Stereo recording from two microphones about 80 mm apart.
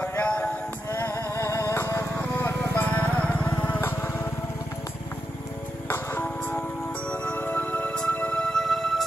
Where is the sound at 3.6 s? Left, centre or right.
Left.